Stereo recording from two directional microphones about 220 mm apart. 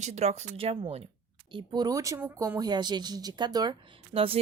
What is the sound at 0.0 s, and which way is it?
Speech, 30° right (ahead or behind).